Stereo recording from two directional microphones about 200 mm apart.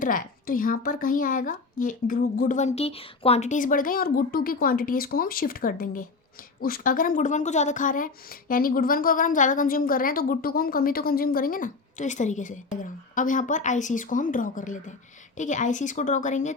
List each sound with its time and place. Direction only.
0.0 s a woman's voice: 45° left (ahead or behind)